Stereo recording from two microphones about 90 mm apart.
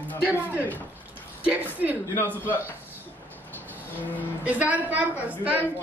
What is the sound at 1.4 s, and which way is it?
Speech, 15° right (ahead or behind).